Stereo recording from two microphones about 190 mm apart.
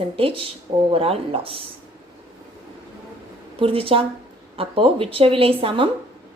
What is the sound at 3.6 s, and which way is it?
A woman's voice, 30° right (ahead or behind).